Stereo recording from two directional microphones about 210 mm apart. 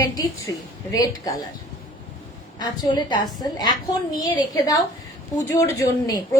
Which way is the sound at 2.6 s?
20° left (ahead or behind).